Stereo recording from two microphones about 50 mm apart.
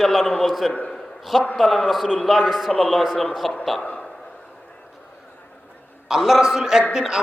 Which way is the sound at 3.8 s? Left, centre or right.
Left.